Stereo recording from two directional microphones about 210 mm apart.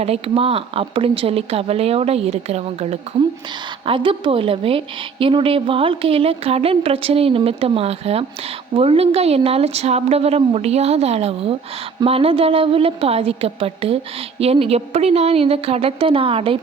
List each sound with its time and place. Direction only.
0.0 s a woman's voice: 30° right (ahead or behind)